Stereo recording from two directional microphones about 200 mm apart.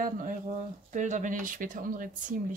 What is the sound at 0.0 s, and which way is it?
A woman's voice, 40° right (ahead or behind).